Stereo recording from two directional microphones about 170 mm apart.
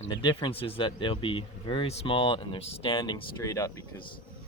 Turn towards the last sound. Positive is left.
turn(degrees=20)  # may be behind; listen again after turning